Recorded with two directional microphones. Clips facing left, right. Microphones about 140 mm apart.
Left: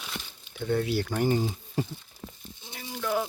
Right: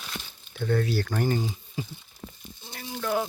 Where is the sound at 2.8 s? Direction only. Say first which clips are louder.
Right 1 dB; centre (ahead or behind).